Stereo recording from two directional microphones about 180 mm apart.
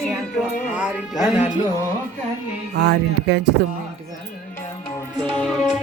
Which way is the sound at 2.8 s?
70° right (ahead or behind).